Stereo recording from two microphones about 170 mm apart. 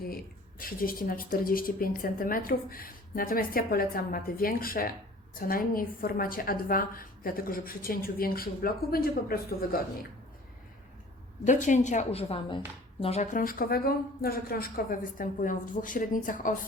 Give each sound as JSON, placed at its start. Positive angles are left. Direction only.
{"t": 0.6, "sound": "a woman's voice", "side_deg": 55}
{"t": 11.4, "sound": "a woman's voice", "side_deg": 45}
{"t": 13.3, "sound": "a woman's voice", "side_deg": 55}